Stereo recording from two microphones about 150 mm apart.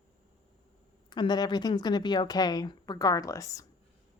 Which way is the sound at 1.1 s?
30° left (ahead or behind).